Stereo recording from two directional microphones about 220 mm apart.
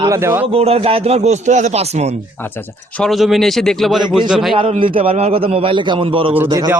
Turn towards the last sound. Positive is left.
turn(degrees=-20)  # may be behind; listen again after turning